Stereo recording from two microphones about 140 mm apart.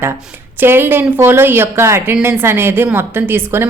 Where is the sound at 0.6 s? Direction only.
15° right (ahead or behind).